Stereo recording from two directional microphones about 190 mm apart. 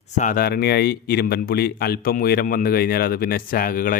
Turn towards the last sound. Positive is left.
turn(degrees=45)  # may be behind; listen again after turning